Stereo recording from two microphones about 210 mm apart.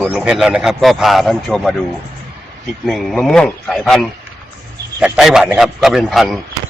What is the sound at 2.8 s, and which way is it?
Speech, centre (ahead or behind).